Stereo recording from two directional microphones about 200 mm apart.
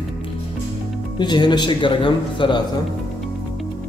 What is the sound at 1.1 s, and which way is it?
Speech, 20° left (ahead or behind).